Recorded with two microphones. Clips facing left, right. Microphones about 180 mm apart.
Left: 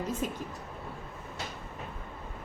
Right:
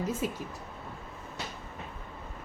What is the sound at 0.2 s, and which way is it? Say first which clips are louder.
Speech: right 1 dB; 5° right (ahead or behind).